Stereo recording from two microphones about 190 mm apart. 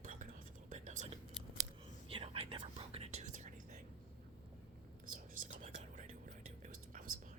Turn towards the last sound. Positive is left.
turn(degrees=-40)  # may be behind; listen again after turning